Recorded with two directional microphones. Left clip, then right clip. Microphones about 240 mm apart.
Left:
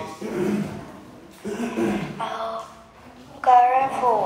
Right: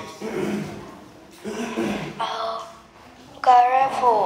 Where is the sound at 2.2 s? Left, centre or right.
Centre.